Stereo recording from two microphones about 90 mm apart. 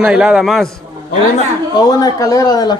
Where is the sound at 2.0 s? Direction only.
40° left (ahead or behind).